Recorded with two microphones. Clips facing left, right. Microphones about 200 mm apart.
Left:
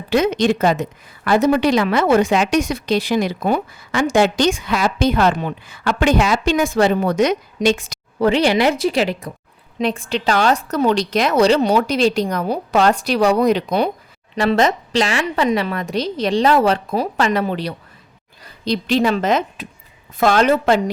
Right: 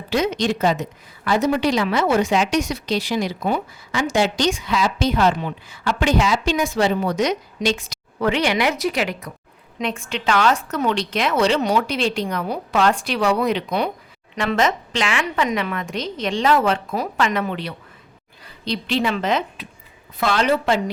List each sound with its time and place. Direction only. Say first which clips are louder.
0.1 s a woman's voice: left 5 dB; 55° left (ahead or behind)
8.2 s a woman's voice: left 5 dB; 30° left (ahead or behind)